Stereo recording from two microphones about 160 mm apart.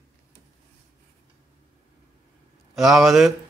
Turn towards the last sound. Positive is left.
turn(degrees=0)  # may be behind; listen again after turning